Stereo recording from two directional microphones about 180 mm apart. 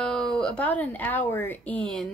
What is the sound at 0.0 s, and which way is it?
Speech, 5° left (ahead or behind).